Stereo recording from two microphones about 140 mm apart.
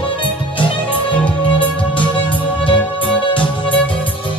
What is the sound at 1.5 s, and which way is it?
Music, 35° left (ahead or behind).